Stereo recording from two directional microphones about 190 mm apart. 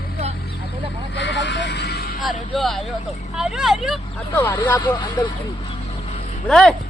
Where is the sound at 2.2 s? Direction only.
Centre (ahead or behind).